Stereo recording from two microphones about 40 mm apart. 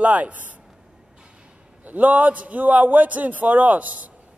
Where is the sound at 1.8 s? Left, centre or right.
Right.